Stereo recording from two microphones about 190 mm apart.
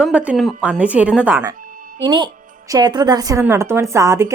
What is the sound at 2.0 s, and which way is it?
A woman's voice, 25° right (ahead or behind).